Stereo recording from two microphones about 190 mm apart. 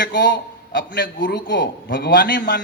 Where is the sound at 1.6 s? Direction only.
65° left (ahead or behind).